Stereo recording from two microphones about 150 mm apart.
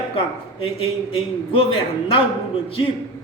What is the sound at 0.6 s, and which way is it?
A woman's voice, 40° left (ahead or behind).